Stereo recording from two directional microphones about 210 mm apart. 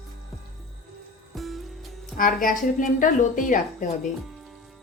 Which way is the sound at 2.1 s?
40° left (ahead or behind).